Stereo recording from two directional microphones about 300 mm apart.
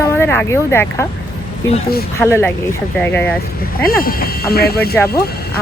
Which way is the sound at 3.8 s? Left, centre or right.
Left.